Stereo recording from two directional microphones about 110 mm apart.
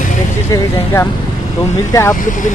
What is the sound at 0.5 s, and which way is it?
Speech, 30° left (ahead or behind).